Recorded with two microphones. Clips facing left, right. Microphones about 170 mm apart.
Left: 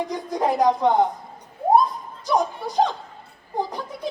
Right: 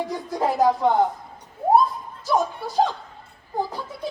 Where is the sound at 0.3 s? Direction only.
15° left (ahead or behind).